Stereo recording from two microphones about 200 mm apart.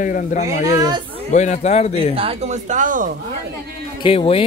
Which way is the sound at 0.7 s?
20° right (ahead or behind).